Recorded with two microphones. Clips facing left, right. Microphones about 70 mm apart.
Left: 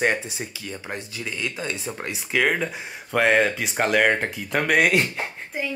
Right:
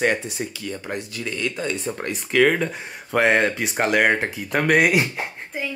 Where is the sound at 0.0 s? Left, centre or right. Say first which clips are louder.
Right 2 dB; left.